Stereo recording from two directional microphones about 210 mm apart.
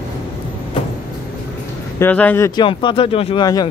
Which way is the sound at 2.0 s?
10° left (ahead or behind).